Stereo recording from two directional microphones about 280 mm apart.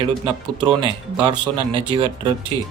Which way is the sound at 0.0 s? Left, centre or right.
Centre.